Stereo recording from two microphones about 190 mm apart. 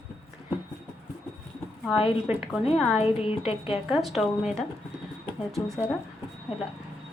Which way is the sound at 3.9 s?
Centre (ahead or behind).